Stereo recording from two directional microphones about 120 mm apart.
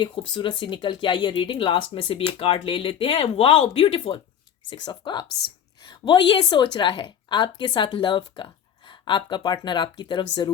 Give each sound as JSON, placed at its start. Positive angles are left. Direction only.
{"t": 0.0, "sound": "speech", "side_deg": 40}
{"t": 4.7, "sound": "a woman's voice", "side_deg": 40}